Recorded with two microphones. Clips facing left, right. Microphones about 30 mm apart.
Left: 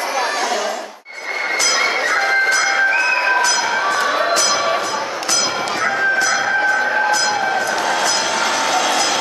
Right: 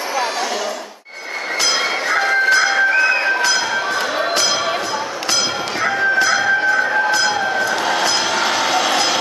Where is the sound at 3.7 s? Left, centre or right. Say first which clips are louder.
Left 2 dB; centre.